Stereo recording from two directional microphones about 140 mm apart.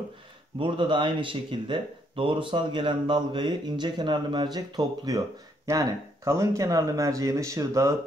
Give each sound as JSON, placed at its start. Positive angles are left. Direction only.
{"t": 0.6, "sound": "speech", "side_deg": -35}